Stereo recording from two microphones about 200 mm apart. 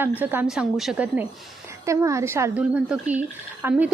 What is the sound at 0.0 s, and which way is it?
A woman's voice, 10° right (ahead or behind).